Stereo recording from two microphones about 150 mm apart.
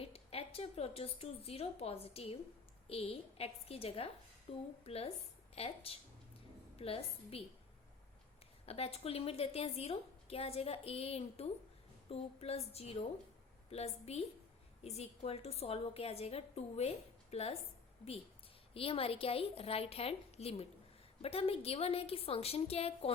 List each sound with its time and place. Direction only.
0.0 s a woman's voice: 40° left (ahead or behind)
8.6 s a woman's voice: 40° left (ahead or behind)
18.7 s a woman's voice: 40° left (ahead or behind)